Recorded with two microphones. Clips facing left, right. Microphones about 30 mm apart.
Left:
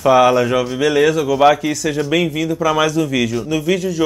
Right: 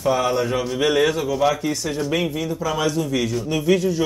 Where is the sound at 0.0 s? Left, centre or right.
Left.